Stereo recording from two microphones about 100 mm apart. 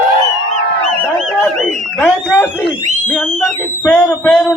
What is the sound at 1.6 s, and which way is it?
Speech, 20° left (ahead or behind).